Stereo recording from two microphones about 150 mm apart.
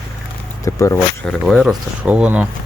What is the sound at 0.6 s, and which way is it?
Speech, 20° left (ahead or behind).